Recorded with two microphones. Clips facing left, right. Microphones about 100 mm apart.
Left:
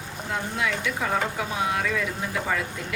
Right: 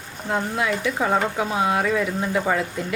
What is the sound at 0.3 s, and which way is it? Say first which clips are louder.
Speech: right 5 dB; 30° right (ahead or behind).